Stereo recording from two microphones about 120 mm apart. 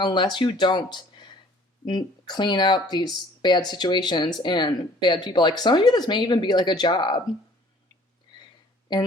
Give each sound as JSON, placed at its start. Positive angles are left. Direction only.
{"t": 0.0, "sound": "speech", "side_deg": 40}